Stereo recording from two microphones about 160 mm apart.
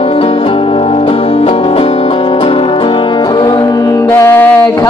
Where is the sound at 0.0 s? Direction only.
40° left (ahead or behind).